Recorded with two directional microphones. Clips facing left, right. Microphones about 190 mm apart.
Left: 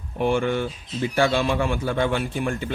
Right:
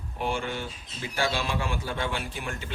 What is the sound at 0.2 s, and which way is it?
A man's voice, 55° left (ahead or behind).